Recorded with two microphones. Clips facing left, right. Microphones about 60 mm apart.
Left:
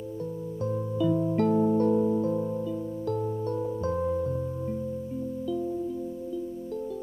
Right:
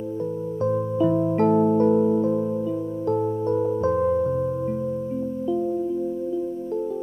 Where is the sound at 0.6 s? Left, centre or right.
Right.